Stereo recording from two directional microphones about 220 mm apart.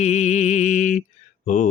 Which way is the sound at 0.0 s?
30° left (ahead or behind).